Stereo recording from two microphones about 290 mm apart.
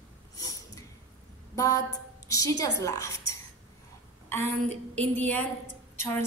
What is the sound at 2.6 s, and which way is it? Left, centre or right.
Speech, centre.